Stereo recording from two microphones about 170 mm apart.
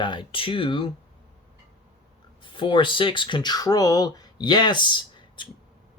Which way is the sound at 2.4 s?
30° left (ahead or behind).